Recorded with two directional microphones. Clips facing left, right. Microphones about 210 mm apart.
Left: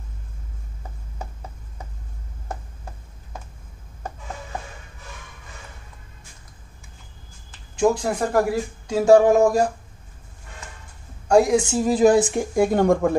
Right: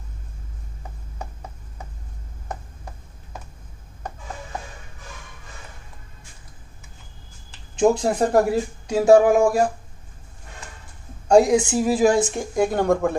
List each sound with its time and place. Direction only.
7.8 s speech: 30° right (ahead or behind)
8.8 s a sound: 10° right (ahead or behind)
11.2 s speech: 20° right (ahead or behind)
11.9 s speech: centre (ahead or behind)